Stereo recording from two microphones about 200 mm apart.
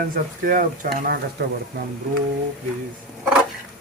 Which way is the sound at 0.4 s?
45° right (ahead or behind).